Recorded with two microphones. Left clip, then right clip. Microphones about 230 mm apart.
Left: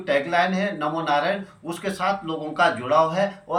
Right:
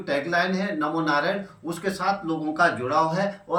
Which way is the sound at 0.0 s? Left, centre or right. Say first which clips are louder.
Left 3 dB; centre.